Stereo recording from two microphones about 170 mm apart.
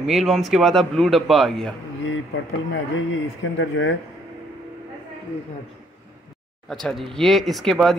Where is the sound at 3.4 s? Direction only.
90° left.